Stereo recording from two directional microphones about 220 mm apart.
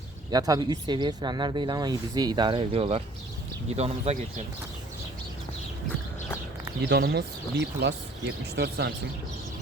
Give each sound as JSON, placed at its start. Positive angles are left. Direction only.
{"t": 0.3, "sound": "speech", "side_deg": -15}
{"t": 6.8, "sound": "speech", "side_deg": -45}